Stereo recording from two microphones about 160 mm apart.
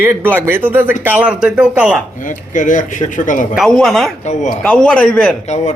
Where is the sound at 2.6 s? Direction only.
55° left (ahead or behind).